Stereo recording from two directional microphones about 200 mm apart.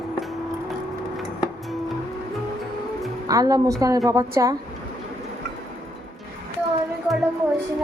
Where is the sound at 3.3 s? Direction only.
20° right (ahead or behind).